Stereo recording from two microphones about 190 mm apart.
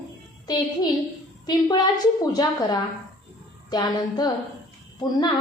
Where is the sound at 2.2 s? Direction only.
20° left (ahead or behind).